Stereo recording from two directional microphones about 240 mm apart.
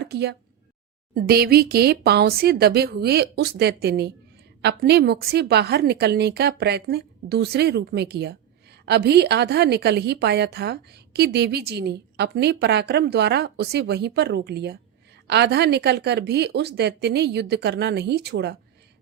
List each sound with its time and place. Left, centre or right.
0.0 s a woman's voice: right